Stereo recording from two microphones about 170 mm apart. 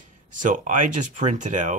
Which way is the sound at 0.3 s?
50° right (ahead or behind).